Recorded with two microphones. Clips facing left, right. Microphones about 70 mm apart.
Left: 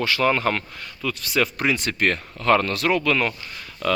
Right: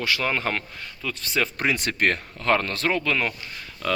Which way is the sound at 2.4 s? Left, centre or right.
Right.